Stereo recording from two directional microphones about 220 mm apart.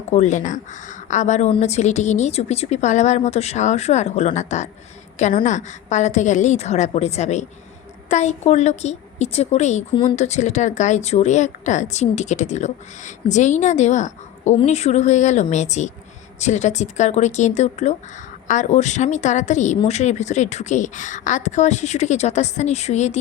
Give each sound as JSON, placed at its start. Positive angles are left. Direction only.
{"t": 0.1, "sound": "a woman's voice", "side_deg": 30}